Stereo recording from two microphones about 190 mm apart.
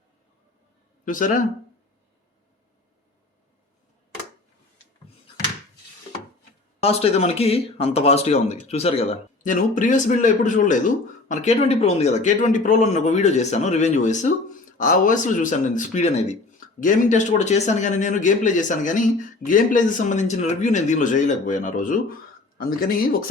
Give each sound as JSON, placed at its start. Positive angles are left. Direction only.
{"t": 1.0, "sound": "speech", "side_deg": 45}
{"t": 6.8, "sound": "speech", "side_deg": 35}